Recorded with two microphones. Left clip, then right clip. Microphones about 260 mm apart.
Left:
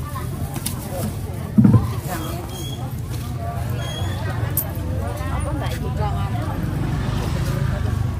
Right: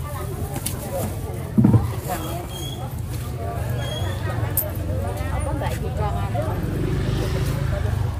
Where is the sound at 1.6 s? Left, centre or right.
Right.